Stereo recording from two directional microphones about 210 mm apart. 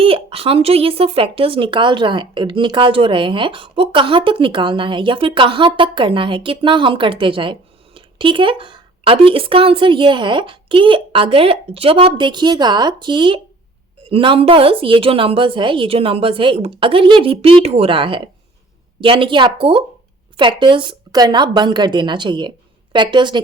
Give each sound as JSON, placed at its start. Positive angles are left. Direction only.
{"t": 0.0, "sound": "speech", "side_deg": -25}